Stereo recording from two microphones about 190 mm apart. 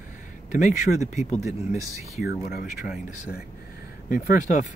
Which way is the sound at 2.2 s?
55° left (ahead or behind).